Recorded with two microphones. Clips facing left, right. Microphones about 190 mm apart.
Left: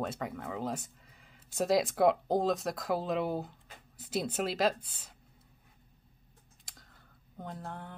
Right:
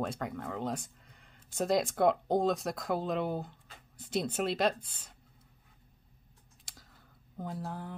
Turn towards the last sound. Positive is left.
turn(degrees=-5)  # may be behind; listen again after turning